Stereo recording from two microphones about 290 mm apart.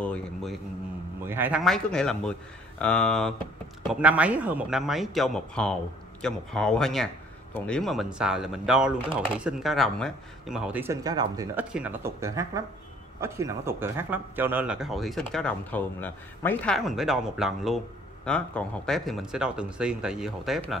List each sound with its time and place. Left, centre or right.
0.0 s speech: centre